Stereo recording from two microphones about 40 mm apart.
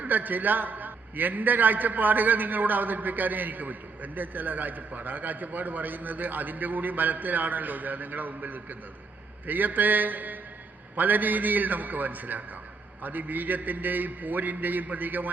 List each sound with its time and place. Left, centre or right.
0.0 s a man's voice: right